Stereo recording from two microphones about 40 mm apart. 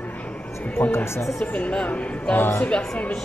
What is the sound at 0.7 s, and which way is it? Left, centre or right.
Speech, left.